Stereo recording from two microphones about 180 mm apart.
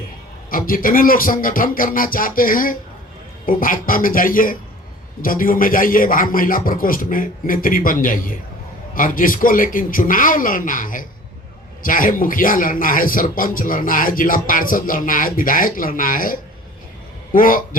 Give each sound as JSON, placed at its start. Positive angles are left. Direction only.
{"t": 0.5, "sound": "speech", "side_deg": 50}